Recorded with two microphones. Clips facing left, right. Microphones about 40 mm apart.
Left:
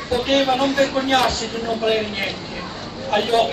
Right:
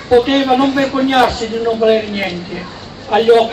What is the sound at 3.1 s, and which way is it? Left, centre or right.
Speech, right.